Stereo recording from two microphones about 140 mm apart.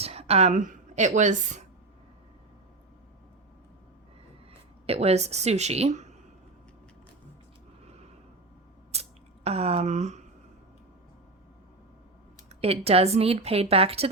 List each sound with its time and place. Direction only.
0.0 s a sound: 45° right (ahead or behind)
0.5 s a woman's voice: 70° right (ahead or behind)
4.9 s speech: 50° right (ahead or behind)
8.9 s squish: 50° right (ahead or behind)
12.5 s speech: 45° right (ahead or behind)